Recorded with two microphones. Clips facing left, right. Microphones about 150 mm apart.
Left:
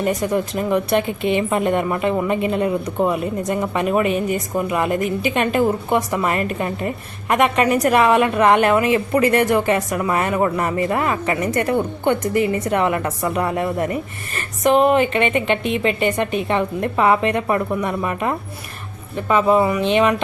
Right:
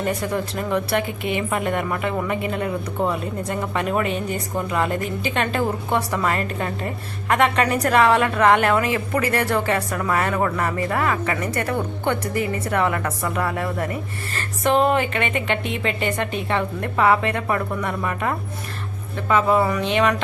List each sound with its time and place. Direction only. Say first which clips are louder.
0.0 s a woman's voice: left 4 dB; 15° left (ahead or behind)